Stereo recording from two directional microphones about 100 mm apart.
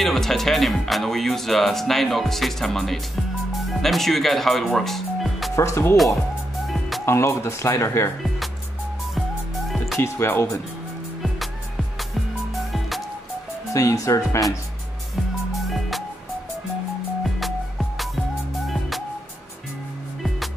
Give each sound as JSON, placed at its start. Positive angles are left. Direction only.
{"t": 0.0, "sound": "speech", "side_deg": 5}
{"t": 5.6, "sound": "speech", "side_deg": 25}
{"t": 7.1, "sound": "speech", "side_deg": 25}
{"t": 9.9, "sound": "speech", "side_deg": 25}
{"t": 13.7, "sound": "speech", "side_deg": 30}
{"t": 17.9, "sound": "music", "side_deg": 0}